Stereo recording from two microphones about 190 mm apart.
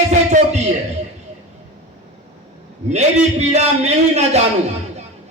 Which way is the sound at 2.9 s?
35° right (ahead or behind).